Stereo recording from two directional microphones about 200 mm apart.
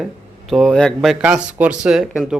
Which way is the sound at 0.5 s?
Centre (ahead or behind).